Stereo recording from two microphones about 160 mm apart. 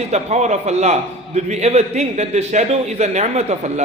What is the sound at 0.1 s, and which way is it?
A man's voice, 45° right (ahead or behind).